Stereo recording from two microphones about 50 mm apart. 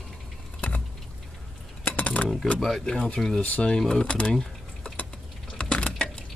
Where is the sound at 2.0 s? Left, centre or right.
Left.